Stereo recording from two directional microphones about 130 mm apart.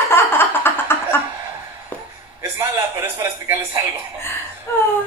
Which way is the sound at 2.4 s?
20° right (ahead or behind).